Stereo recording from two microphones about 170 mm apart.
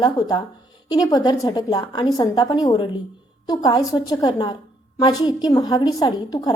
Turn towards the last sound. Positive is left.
turn(degrees=25)  # may be behind; listen again after turning